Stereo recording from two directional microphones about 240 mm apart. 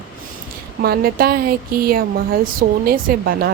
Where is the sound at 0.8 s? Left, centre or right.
Right.